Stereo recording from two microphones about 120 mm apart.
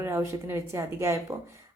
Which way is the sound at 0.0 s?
20° right (ahead or behind).